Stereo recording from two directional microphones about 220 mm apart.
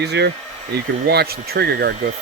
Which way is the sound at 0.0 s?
50° right (ahead or behind).